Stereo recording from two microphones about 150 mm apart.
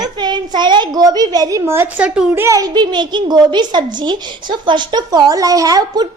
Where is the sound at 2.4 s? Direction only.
25° right (ahead or behind).